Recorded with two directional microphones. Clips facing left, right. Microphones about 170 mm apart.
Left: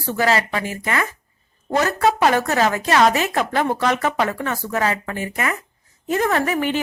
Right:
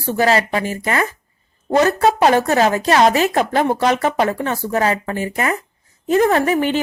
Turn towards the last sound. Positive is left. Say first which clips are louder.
# right 4 dB
turn(degrees=-30)  # may be behind; listen again after turning